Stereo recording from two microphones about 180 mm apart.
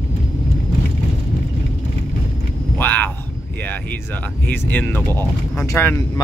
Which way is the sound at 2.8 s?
10° left (ahead or behind).